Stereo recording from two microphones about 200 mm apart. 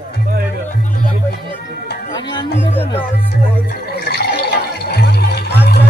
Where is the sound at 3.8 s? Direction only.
55° left (ahead or behind).